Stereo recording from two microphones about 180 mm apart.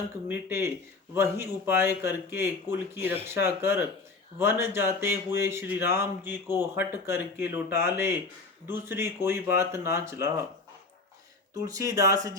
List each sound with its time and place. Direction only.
0.3 s speech: 15° right (ahead or behind)
11.6 s speech: 20° right (ahead or behind)